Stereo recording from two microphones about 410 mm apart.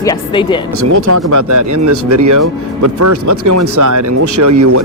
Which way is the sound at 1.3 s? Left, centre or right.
Right.